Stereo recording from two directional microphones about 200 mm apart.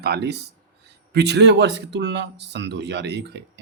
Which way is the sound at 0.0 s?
55° right (ahead or behind).